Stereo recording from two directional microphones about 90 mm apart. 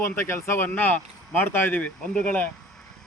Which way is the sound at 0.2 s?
30° left (ahead or behind).